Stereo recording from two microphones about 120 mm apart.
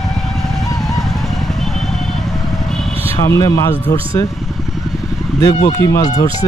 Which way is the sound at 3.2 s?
30° left (ahead or behind).